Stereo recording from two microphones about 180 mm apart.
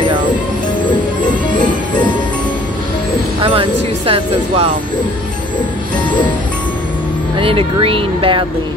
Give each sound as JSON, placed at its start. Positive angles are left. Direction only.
{"t": 0.8, "sound": "music", "side_deg": 25}
{"t": 3.4, "sound": "music", "side_deg": -30}
{"t": 7.3, "sound": "speech", "side_deg": -30}